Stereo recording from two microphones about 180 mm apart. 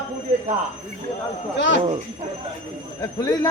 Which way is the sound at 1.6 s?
90° left.